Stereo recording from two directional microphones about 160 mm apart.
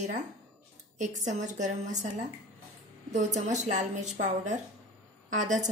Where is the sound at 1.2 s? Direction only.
50° right (ahead or behind).